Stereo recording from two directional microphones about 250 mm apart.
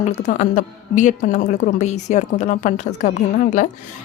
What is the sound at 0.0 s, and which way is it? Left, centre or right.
Speech, left.